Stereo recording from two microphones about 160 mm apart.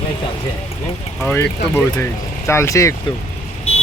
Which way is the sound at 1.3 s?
15° left (ahead or behind).